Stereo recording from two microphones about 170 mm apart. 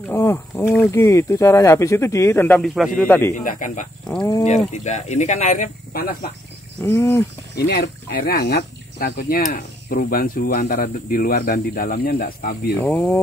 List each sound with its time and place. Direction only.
0.1 s speech: 15° left (ahead or behind)
3.3 s speech: 50° left (ahead or behind)
4.8 s speech: 45° left (ahead or behind)
6.8 s speech: 15° left (ahead or behind)
7.5 s speech: 80° left; by 12.7 s 60° left (ahead or behind)
12.7 s speech: 10° left (ahead or behind)